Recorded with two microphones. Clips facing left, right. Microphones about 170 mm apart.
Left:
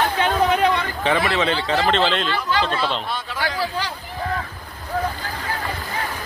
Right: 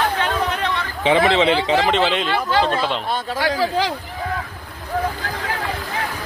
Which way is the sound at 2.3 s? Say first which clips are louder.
Right 3 dB; 50° right (ahead or behind).